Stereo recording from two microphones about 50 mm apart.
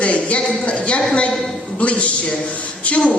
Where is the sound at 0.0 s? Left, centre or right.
Left.